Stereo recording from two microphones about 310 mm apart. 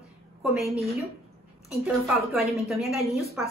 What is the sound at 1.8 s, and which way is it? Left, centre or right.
A woman's voice, centre.